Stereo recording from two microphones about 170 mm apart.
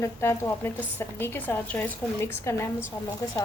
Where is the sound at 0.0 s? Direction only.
15° left (ahead or behind).